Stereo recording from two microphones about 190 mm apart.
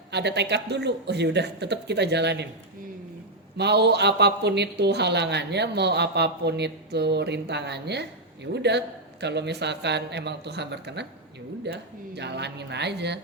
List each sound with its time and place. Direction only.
0.1 s speech: 65° right (ahead or behind)
3.6 s speech: 60° right (ahead or behind)